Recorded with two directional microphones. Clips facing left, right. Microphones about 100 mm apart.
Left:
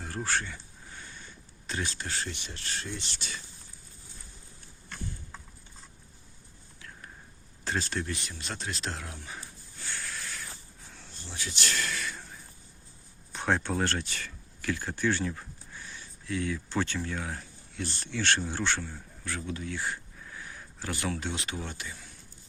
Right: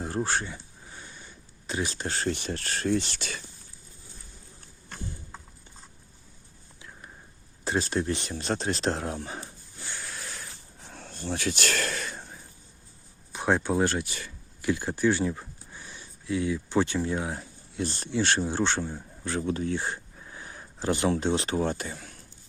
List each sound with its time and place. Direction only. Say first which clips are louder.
0.0 s a sound: right 4 dB; 25° right (ahead or behind)
1.7 s speech: right 4 dB; 20° right (ahead or behind)
2.0 s speech: right 8 dB; 45° right (ahead or behind); by 3.3 s 60° right (ahead or behind)
7.6 s speech: right 5 dB; 20° right (ahead or behind)
8.0 s speech: right 8 dB; 30° right (ahead or behind)
9.8 s a sound: even; 15° right (ahead or behind)
10.8 s a sound: right 13 dB; 55° right (ahead or behind); by 12.2 s 35° right (ahead or behind)
13.3 s speech: right 4 dB; 10° right (ahead or behind); by 19.4 s 25° right (ahead or behind)
19.4 s speech: right 8 dB; 35° right (ahead or behind)